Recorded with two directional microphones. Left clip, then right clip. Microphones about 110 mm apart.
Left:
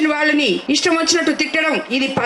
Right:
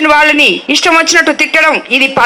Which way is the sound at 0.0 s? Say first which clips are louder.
Right 10 dB; 25° left (ahead or behind).